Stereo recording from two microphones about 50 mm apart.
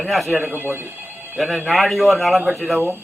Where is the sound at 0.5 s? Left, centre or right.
Right.